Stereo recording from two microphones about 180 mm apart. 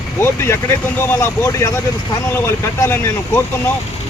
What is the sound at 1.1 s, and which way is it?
Speech, 15° left (ahead or behind).